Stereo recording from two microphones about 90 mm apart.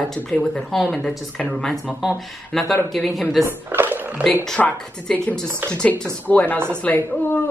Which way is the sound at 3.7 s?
20° right (ahead or behind).